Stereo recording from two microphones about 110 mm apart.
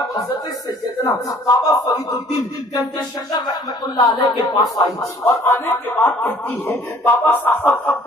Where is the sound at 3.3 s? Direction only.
35° left (ahead or behind).